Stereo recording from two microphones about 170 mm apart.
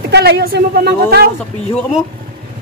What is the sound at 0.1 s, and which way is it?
A woman's voice, 70° right (ahead or behind).